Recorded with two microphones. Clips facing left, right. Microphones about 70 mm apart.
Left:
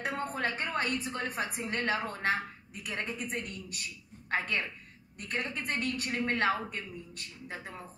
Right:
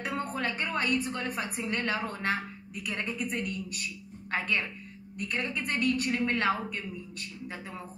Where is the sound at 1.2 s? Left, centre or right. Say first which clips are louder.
Right 1 dB; left.